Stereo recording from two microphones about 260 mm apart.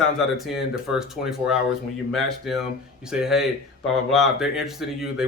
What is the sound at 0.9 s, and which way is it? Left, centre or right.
Speech, centre.